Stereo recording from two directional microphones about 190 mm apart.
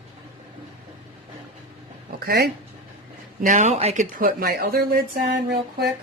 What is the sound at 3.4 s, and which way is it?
A woman's voice, 40° right (ahead or behind).